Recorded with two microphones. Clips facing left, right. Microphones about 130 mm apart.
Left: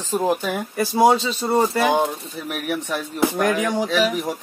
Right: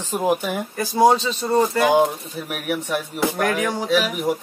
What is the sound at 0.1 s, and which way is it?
Speech, 15° right (ahead or behind).